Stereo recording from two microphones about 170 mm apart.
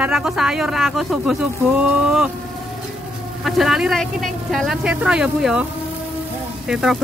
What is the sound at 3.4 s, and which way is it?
Speech, centre (ahead or behind).